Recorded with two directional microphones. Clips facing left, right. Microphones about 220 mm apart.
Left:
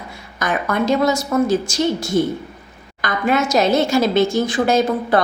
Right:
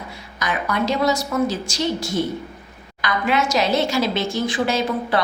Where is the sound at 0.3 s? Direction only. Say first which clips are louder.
Left 3 dB; 50° left (ahead or behind).